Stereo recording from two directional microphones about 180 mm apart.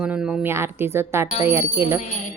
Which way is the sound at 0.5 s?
15° right (ahead or behind).